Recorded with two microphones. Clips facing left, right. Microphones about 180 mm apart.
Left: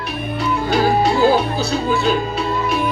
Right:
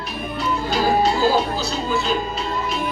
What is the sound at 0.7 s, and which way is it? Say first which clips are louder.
Music: left 3 dB; 60° left (ahead or behind).